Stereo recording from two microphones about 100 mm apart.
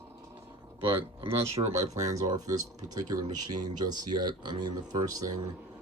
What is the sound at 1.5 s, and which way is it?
Speech, 35° right (ahead or behind).